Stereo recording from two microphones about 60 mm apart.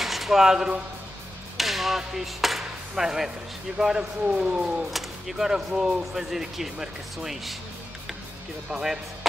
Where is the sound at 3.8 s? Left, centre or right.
Centre.